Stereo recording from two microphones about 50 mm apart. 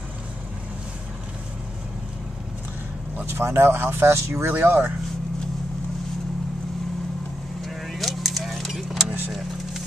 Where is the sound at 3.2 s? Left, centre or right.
Right.